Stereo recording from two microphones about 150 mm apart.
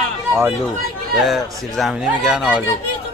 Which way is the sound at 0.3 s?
15° right (ahead or behind).